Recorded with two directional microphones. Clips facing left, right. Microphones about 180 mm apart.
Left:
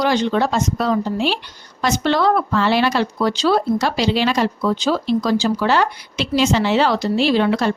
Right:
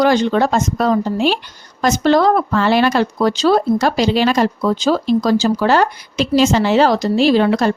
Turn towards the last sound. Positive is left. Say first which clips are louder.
# right 4 dB
turn(degrees=-40)  # may be behind; listen again after turning